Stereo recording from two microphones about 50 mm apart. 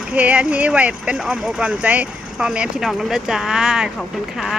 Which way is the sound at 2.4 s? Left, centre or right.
Centre.